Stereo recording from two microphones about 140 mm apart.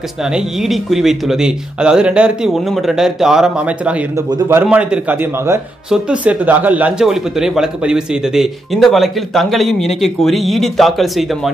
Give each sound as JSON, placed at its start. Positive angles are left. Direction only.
{"t": 0.2, "sound": "a man's voice", "side_deg": -5}